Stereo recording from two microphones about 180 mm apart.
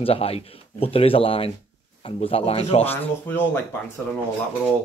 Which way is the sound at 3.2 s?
10° left (ahead or behind).